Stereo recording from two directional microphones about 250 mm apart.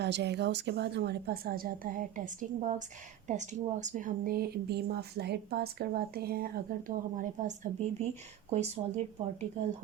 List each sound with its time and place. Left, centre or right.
0.0 s speech: right